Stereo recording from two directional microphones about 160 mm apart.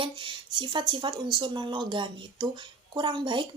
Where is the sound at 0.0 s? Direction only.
30° right (ahead or behind).